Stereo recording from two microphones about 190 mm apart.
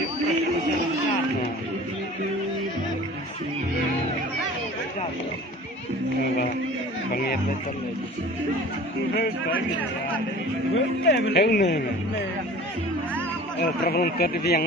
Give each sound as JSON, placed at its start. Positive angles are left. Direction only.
{"t": 9.1, "sound": "speech", "side_deg": 55}
{"t": 10.8, "sound": "speech", "side_deg": 65}
{"t": 13.6, "sound": "speech", "side_deg": 55}